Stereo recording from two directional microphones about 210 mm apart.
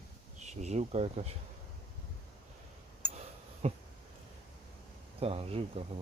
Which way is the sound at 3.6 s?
30° right (ahead or behind).